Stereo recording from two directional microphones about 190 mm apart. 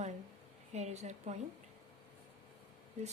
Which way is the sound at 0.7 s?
35° right (ahead or behind).